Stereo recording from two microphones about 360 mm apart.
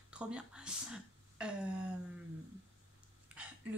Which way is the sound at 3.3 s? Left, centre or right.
Centre.